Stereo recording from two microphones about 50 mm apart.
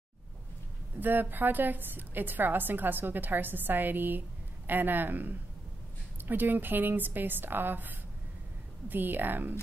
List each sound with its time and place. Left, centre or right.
0.9 s a woman's voice: right